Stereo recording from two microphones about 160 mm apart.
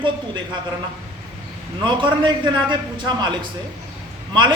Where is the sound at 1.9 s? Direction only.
30° right (ahead or behind).